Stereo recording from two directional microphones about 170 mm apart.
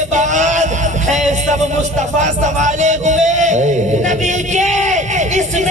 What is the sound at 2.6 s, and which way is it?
Music, 45° right (ahead or behind).